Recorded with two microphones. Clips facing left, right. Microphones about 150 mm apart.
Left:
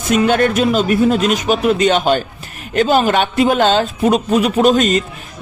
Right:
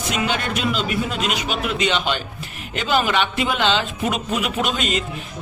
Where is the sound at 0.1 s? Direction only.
50° left (ahead or behind).